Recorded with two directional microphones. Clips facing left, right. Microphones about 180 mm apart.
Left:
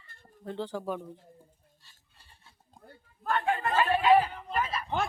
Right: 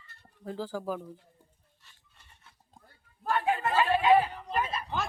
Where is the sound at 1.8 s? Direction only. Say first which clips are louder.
Right 1 dB; 35° left (ahead or behind).